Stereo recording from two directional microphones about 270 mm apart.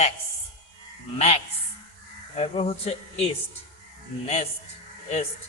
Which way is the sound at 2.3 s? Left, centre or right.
Left.